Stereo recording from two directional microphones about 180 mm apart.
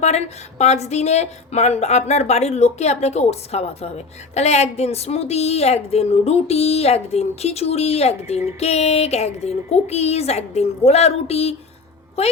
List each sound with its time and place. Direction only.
0.0 s speech: 35° left (ahead or behind)